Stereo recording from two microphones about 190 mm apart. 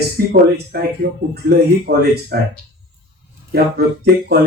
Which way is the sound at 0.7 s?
55° right (ahead or behind).